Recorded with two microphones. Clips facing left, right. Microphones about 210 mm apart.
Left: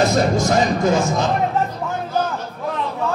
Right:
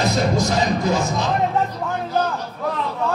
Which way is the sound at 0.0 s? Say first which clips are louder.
Left 3 dB; 50° left (ahead or behind).